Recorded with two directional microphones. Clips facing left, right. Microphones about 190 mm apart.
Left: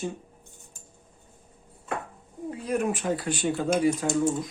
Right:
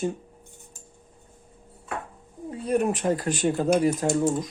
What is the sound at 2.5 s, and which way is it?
Speech, 30° right (ahead or behind).